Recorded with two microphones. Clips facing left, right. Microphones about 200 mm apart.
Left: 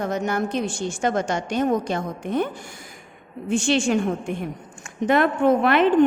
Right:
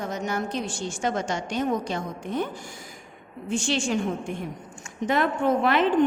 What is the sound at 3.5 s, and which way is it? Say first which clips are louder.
Speech: left 5 dB; 60° left (ahead or behind).